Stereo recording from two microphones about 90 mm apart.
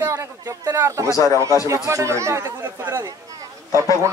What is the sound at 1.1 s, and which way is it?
Speech, 35° left (ahead or behind).